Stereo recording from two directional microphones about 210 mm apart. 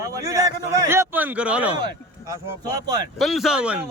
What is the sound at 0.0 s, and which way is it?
A man's voice, 15° right (ahead or behind).